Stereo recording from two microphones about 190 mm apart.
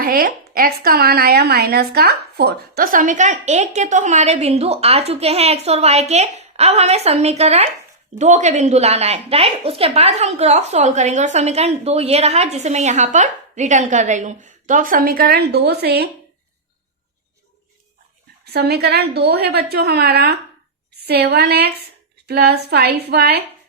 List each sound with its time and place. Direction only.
0.0 s a woman's voice: 50° right (ahead or behind)
18.5 s a woman's voice: 60° right (ahead or behind)